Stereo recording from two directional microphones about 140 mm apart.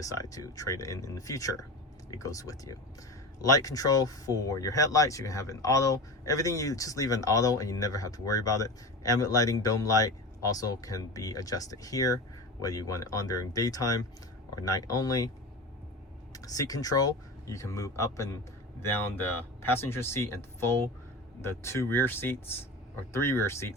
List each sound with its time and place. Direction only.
0.0 s speech: 25° left (ahead or behind)
16.3 s speech: 25° left (ahead or behind)